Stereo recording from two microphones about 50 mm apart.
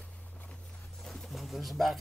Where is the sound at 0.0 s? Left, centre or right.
Left.